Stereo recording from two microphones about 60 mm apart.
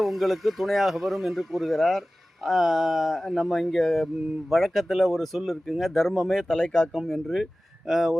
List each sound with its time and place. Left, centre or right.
0.0 s speech: centre
6.9 s speech: centre